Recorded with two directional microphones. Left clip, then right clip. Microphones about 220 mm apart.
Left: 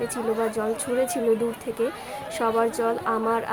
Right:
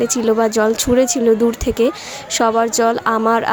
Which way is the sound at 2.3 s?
40° right (ahead or behind).